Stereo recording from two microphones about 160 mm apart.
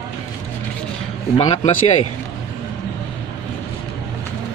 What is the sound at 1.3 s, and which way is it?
Speech, 40° left (ahead or behind).